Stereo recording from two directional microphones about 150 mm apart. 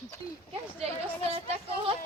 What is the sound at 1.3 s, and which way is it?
Speech, 45° right (ahead or behind).